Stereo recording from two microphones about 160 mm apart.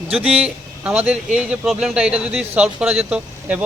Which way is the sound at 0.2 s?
5° right (ahead or behind).